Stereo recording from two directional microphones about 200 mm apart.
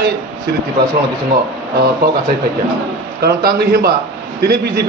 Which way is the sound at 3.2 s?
50° right (ahead or behind).